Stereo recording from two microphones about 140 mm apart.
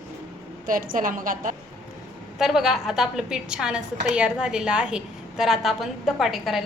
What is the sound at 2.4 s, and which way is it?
A woman's voice, 5° right (ahead or behind).